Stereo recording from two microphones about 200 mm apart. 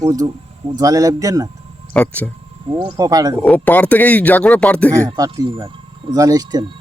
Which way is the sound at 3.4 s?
10° left (ahead or behind).